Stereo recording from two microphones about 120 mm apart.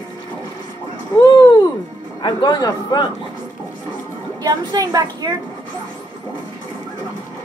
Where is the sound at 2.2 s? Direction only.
40° left (ahead or behind).